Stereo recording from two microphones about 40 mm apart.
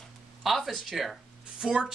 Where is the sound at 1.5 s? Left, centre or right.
Centre.